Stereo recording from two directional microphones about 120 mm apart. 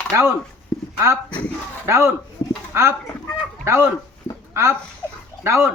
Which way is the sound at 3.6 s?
20° right (ahead or behind).